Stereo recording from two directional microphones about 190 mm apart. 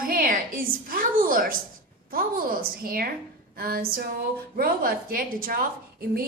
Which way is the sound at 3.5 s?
50° right (ahead or behind).